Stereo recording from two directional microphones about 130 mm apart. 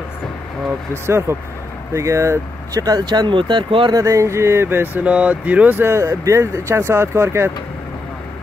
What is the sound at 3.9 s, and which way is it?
Speech, 25° right (ahead or behind).